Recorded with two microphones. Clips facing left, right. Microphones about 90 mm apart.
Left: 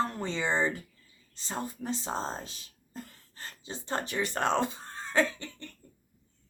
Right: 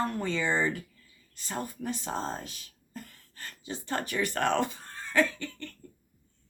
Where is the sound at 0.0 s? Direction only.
20° left (ahead or behind).